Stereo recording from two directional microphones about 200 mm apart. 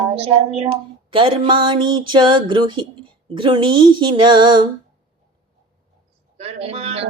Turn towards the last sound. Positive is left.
turn(degrees=-30)  # may be behind; listen again after turning